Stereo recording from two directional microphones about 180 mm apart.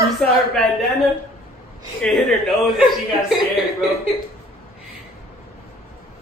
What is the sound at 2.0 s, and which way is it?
A woman's voice, centre (ahead or behind).